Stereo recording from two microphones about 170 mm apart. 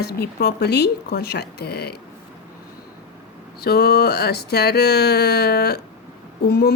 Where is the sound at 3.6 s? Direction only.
70° left (ahead or behind).